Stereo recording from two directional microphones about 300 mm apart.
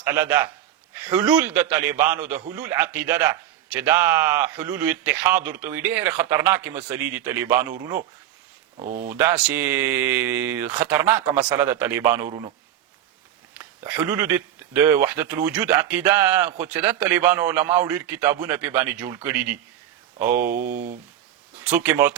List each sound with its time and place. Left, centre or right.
0.0 s speech: centre
8.8 s speech: right
9.0 s speech: centre
13.6 s speech: centre
20.5 s speech: right
21.6 s speech: centre